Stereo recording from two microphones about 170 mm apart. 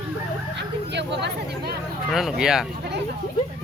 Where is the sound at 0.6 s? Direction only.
90° right.